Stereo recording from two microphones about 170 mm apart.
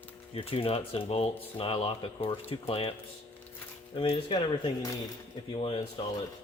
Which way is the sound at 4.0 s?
30° left (ahead or behind).